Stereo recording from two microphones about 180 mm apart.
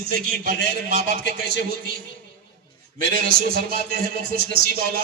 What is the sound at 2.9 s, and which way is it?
Speech, 55° right (ahead or behind).